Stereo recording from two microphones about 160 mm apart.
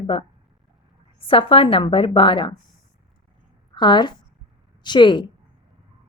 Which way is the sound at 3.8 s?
30° left (ahead or behind).